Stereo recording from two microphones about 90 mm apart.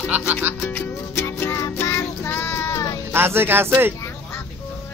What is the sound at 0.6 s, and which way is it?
Music, 20° left (ahead or behind).